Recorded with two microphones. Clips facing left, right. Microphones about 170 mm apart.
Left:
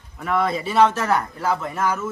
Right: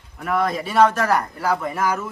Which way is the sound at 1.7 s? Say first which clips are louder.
Right 1 dB; 10° right (ahead or behind).